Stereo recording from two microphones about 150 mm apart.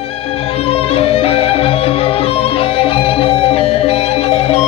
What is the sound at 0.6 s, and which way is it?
Music, 40° left (ahead or behind).